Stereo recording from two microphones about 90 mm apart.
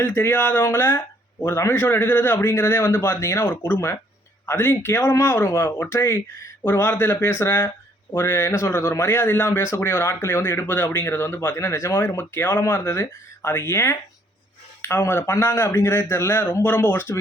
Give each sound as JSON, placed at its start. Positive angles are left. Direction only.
{"t": 0.0, "sound": "speech", "side_deg": 20}